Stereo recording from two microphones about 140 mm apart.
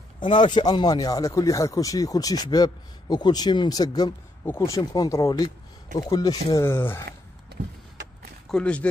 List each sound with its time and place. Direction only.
0.2 s speech: 35° left (ahead or behind)
6.6 s speech: 15° left (ahead or behind)
8.5 s speech: 5° left (ahead or behind)